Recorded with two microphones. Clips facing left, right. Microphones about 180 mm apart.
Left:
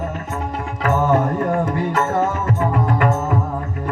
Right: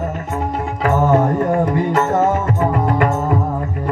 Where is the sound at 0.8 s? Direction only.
40° right (ahead or behind).